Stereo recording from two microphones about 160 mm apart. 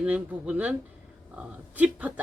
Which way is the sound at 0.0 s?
5° right (ahead or behind).